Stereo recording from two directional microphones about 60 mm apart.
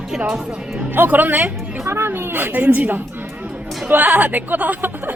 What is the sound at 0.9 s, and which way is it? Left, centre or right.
Speech, right.